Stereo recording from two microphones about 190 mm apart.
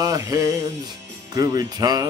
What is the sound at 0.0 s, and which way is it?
Music, 20° right (ahead or behind).